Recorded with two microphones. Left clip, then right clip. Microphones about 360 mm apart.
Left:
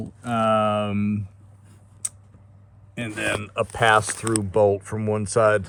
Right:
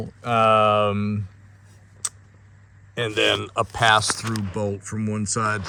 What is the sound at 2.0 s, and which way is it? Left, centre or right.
Tick-tock, centre.